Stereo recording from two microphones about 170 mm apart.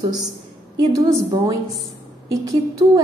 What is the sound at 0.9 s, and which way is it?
Speech, 20° right (ahead or behind).